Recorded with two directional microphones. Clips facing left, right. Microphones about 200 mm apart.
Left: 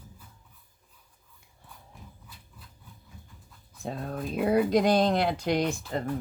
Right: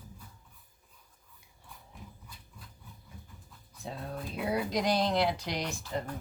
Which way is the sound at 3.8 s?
50° left (ahead or behind).